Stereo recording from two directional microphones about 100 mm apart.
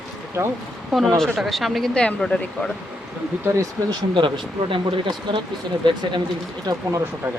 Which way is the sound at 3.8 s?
55° right (ahead or behind).